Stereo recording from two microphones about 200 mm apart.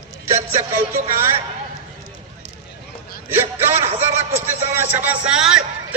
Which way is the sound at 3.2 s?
10° right (ahead or behind).